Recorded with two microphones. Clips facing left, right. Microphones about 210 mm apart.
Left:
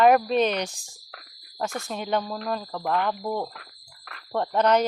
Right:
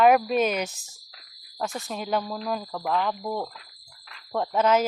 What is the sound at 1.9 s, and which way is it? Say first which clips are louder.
A woman's voice: even; centre (ahead or behind).